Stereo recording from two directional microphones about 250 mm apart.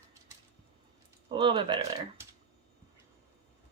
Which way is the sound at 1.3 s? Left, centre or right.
Centre.